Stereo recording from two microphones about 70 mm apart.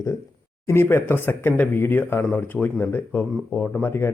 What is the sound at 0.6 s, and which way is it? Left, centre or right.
Speech, left.